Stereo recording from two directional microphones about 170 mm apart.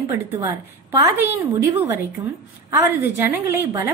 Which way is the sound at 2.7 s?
15° right (ahead or behind).